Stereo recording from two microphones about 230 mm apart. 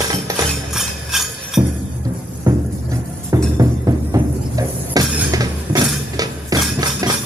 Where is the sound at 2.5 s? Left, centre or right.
Centre.